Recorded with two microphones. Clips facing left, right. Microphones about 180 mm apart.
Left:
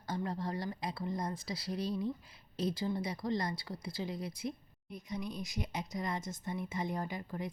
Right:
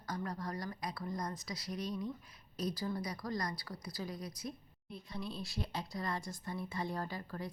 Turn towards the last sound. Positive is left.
turn(degrees=20)  # may be behind; listen again after turning